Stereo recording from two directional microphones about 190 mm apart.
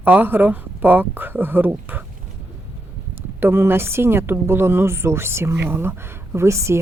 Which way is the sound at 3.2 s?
10° right (ahead or behind).